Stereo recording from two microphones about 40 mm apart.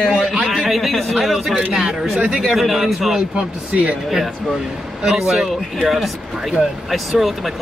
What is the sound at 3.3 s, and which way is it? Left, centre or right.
Speech, right.